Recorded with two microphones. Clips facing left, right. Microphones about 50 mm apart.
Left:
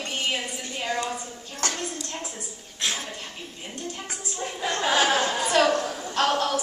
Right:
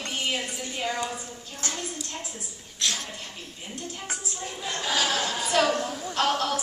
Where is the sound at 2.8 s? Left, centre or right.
Left.